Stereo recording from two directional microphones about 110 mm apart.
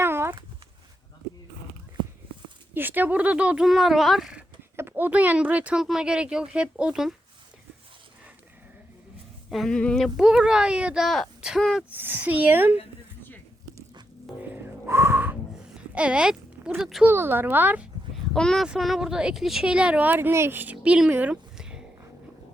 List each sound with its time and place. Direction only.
0.0 s a sound: 20° right (ahead or behind)
2.7 s speech: 15° right (ahead or behind)
4.8 s speech: 20° right (ahead or behind)
9.5 s speech: 5° left (ahead or behind)
10.2 s speech: 5° right (ahead or behind)
11.9 s speech: 20° right (ahead or behind)
14.5 s whistling: 25° right (ahead or behind)
15.7 s a sound: 10° right (ahead or behind)
17.0 s speech: 20° right (ahead or behind)
18.3 s speech: 5° left (ahead or behind)